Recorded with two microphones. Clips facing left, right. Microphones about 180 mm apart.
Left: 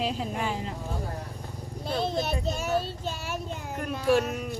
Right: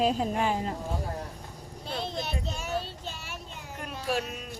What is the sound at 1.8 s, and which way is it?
A child's voice, 40° left (ahead or behind).